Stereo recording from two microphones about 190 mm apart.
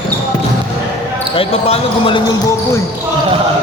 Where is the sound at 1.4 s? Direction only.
30° left (ahead or behind).